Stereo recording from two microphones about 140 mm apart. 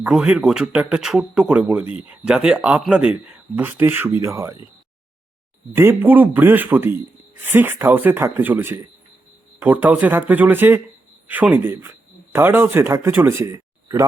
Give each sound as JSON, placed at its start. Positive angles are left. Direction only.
{"t": 0.0, "sound": "speech", "side_deg": -5}
{"t": 5.7, "sound": "speech", "side_deg": -15}